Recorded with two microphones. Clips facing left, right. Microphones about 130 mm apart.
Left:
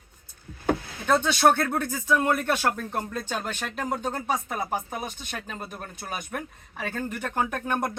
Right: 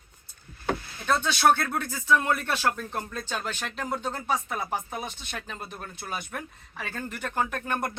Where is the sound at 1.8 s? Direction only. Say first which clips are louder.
Left 1 dB; 45° left (ahead or behind).